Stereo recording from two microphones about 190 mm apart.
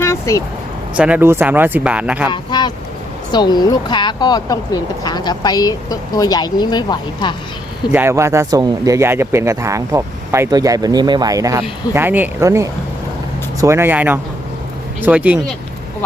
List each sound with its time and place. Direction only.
0.0 s vehicle: 15° left (ahead or behind)
0.9 s speech: 5° right (ahead or behind)
2.3 s speech: 20° left (ahead or behind)
7.9 s speech: 15° right (ahead or behind)